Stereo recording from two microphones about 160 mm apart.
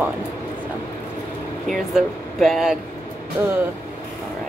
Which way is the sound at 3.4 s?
15° right (ahead or behind).